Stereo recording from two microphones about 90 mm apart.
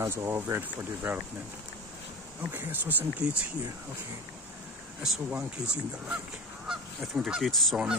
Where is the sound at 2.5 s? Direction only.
20° right (ahead or behind).